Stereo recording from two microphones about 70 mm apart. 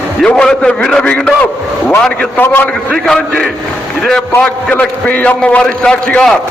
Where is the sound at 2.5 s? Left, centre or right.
Left.